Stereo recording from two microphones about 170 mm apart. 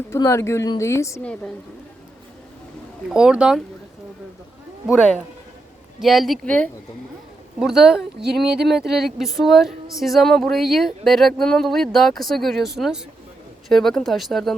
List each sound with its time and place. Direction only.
0.1 s a woman's voice: 15° left (ahead or behind)
3.1 s speech: 5° right (ahead or behind)
6.0 s speech: centre (ahead or behind)
7.6 s speech: 5° right (ahead or behind)